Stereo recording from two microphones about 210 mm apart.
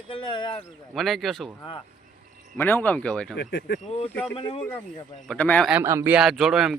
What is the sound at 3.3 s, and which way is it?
Speech, 55° left (ahead or behind).